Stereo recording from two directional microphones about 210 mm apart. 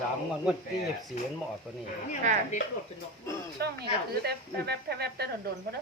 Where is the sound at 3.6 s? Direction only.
50° right (ahead or behind).